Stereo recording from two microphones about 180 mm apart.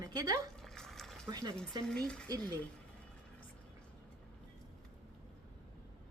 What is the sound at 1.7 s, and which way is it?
Speech, 25° right (ahead or behind).